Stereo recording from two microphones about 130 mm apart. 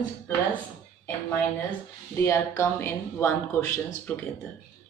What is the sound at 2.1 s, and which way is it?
Speech, 25° left (ahead or behind).